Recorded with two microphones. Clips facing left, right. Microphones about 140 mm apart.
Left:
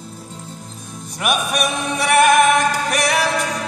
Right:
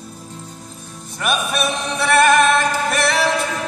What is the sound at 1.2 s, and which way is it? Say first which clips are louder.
Music: left 1 dB; 15° left (ahead or behind).